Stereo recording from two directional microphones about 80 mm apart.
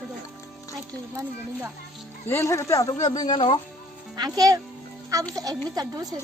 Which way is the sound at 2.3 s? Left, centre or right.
Left.